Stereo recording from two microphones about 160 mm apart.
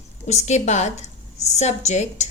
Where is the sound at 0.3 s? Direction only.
45° left (ahead or behind).